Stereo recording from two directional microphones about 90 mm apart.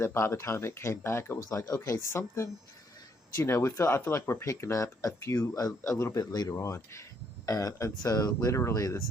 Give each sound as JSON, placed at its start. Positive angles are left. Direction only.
{"t": 0.0, "sound": "speech", "side_deg": 30}